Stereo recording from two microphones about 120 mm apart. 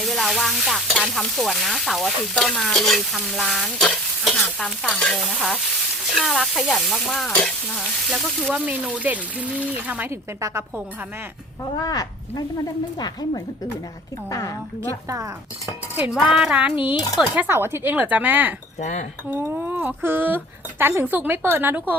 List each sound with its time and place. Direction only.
0.0 s stir: centre (ahead or behind)
8.1 s a woman's voice: 5° right (ahead or behind); by 10.8 s 25° right (ahead or behind)
11.8 s speech: 30° left (ahead or behind)
14.3 s a woman's voice: 30° left (ahead or behind)
16.0 s stir: 5° right (ahead or behind)
16.9 s speech: 35° left (ahead or behind)
17.3 s speech: 15° right (ahead or behind)
18.8 s speech: 80° left
19.5 s speech: 15° right (ahead or behind)